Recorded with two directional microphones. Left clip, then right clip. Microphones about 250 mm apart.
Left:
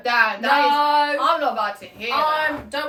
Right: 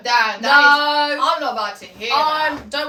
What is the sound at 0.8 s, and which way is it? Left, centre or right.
A woman's voice, centre.